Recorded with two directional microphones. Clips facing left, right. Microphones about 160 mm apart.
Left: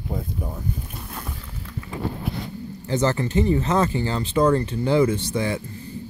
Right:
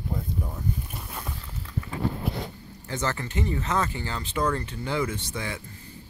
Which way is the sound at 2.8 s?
30° left (ahead or behind).